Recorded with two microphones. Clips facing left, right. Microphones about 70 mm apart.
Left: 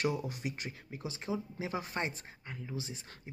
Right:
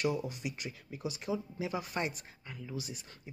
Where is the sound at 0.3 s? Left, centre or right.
Left.